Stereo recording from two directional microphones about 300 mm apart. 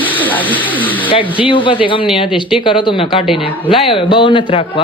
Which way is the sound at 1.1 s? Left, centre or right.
Centre.